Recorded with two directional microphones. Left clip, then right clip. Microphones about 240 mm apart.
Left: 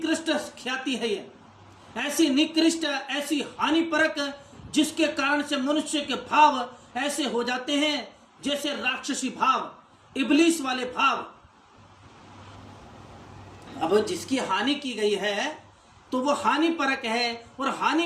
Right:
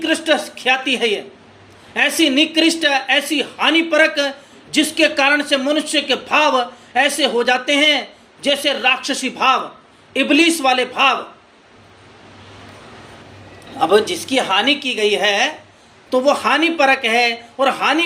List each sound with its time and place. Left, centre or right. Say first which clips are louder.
0.0 s speech: right 10 dB; centre
13.7 s a woman's voice: right 9 dB; centre